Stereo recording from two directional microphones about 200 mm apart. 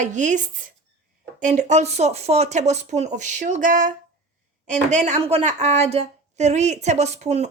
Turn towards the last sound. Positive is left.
turn(degrees=-35)  # may be behind; listen again after turning